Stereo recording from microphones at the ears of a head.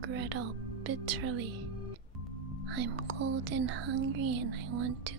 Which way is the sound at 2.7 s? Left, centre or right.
Right.